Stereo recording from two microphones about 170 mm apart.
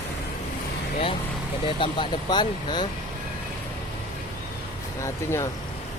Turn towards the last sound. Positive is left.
turn(degrees=15)  # may be behind; listen again after turning